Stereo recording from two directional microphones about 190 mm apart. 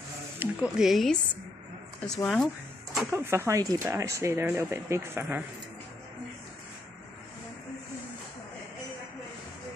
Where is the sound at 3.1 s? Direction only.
10° right (ahead or behind).